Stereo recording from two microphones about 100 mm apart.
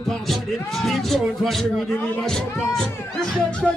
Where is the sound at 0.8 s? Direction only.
Centre (ahead or behind).